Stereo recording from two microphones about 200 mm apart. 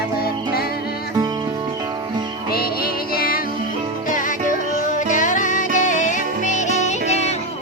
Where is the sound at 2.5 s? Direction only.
50° left (ahead or behind).